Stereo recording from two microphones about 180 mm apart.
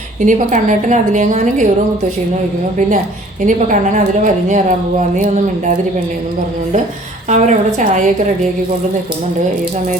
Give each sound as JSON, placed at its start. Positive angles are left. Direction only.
{"t": 0.2, "sound": "a woman's voice", "side_deg": -45}
{"t": 3.4, "sound": "a woman's voice", "side_deg": -45}
{"t": 7.3, "sound": "a woman's voice", "side_deg": -40}